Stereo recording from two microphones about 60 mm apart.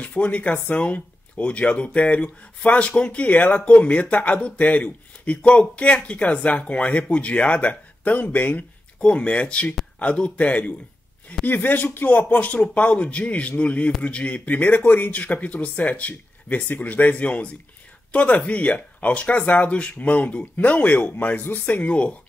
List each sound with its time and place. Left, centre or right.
0.0 s speech: left
9.0 s speech: centre